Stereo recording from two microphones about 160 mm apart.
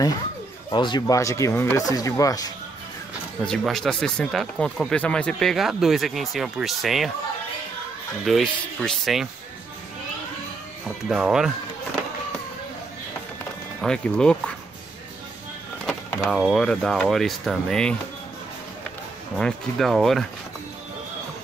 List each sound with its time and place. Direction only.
0.7 s speech: 30° left (ahead or behind)
3.4 s speech: 5° left (ahead or behind)
8.3 s speech: centre (ahead or behind)
11.1 s speech: 5° right (ahead or behind)
13.7 s speech: 5° left (ahead or behind)
15.9 s speech: centre (ahead or behind)
19.3 s speech: 5° left (ahead or behind)